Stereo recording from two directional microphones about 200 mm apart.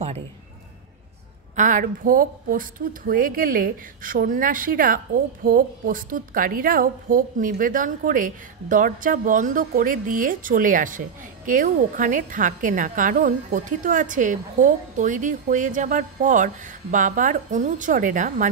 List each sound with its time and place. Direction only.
1.5 s a woman's voice: 40° right (ahead or behind)